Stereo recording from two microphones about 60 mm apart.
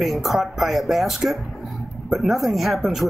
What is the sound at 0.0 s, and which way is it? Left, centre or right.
Speech, centre.